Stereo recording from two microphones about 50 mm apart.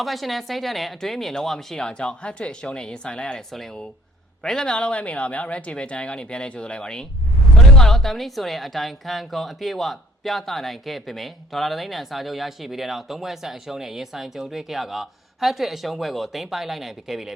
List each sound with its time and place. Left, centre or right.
0.0 s speech: centre
3.5 s a woman's voice: centre
4.4 s a woman's voice: centre